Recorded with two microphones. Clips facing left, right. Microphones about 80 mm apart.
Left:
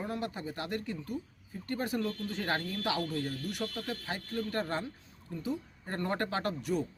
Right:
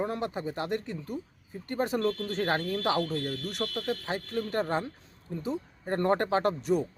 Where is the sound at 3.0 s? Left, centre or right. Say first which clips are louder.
Right 4 dB; right.